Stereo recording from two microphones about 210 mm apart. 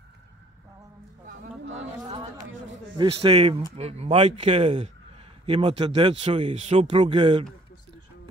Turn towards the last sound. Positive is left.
turn(degrees=-25)  # may be behind; listen again after turning